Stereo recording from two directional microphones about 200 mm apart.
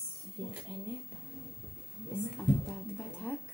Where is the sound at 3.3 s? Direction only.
5° left (ahead or behind).